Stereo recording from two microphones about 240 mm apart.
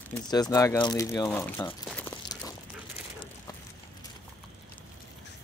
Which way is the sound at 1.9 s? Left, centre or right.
Centre.